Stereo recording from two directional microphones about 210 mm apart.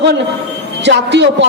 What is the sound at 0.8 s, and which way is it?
Speech, 55° right (ahead or behind).